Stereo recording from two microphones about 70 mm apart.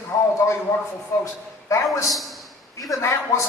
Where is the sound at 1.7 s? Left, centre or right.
Left.